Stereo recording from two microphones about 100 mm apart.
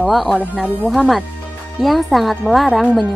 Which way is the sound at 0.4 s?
15° right (ahead or behind).